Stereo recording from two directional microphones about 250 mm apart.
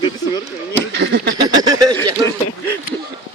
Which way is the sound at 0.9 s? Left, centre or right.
Right.